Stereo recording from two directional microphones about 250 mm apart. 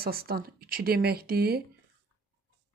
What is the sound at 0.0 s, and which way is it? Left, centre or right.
Speech, right.